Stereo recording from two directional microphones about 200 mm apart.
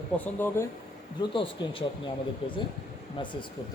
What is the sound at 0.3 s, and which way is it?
Speech, 10° left (ahead or behind).